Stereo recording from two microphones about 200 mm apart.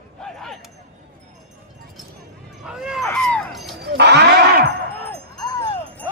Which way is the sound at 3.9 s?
55° right (ahead or behind).